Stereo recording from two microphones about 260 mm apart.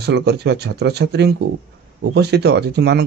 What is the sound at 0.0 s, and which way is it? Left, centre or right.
Speech, right.